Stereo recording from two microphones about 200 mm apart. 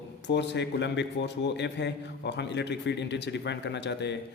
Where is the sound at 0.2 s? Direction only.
60° left (ahead or behind).